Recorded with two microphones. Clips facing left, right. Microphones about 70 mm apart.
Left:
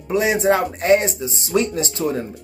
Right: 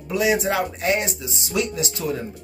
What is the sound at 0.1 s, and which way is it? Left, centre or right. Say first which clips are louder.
Speech: left 4 dB; left.